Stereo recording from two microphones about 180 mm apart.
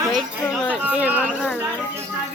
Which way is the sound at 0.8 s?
10° right (ahead or behind).